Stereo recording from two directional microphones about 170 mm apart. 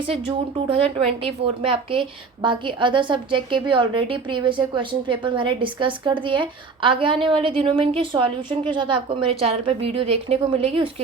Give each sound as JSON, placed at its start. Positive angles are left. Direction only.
{"t": 0.1, "sound": "a woman's voice", "side_deg": -35}